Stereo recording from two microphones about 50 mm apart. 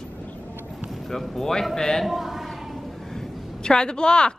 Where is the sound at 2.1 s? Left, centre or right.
Centre.